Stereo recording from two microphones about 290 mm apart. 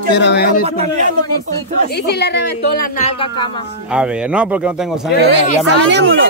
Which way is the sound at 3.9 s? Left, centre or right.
Centre.